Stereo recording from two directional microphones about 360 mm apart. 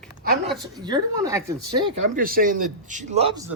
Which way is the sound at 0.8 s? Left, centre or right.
Centre.